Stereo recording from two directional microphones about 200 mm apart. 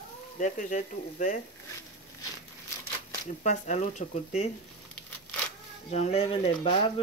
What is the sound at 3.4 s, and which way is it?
Speech, 35° left (ahead or behind).